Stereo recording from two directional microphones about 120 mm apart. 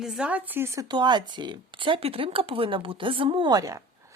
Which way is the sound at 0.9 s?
40° right (ahead or behind).